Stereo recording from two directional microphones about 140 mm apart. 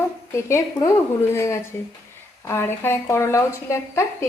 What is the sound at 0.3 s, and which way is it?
A woman's voice, 20° left (ahead or behind).